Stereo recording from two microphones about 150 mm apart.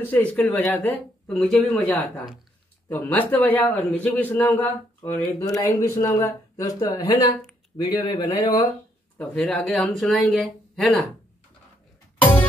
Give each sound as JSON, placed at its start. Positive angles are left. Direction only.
{"t": 0.0, "sound": "speech", "side_deg": 10}
{"t": 2.9, "sound": "a man's voice", "side_deg": 10}
{"t": 9.3, "sound": "speech", "side_deg": 5}